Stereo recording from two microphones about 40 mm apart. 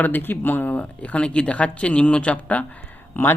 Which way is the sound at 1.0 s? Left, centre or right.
Left.